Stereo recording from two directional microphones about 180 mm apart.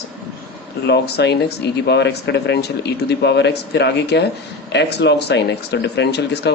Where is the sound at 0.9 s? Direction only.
65° left (ahead or behind).